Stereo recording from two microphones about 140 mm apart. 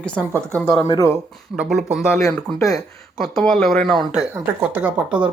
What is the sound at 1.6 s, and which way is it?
Speech, 5° right (ahead or behind).